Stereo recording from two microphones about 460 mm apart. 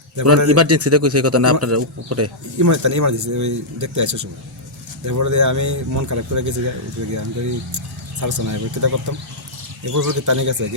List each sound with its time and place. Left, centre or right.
0.2 s a man's voice: right
8.2 s a man's voice: right